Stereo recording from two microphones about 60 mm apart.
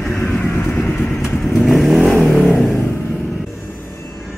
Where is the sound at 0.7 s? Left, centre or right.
Left.